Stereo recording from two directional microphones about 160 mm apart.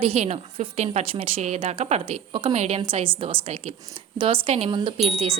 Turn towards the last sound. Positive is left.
turn(degrees=-35)  # may be behind; listen again after turning